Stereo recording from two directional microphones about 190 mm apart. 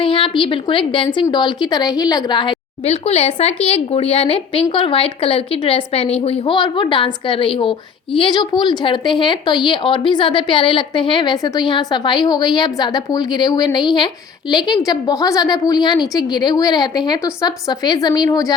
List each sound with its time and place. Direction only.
0.0 s a woman's voice: 30° left (ahead or behind)